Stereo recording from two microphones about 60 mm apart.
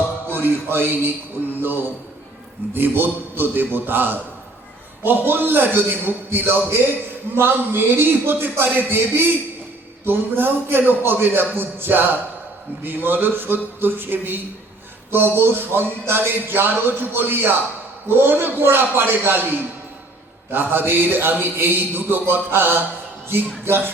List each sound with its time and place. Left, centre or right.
0.3 s speech: right
2.7 s a man's voice: right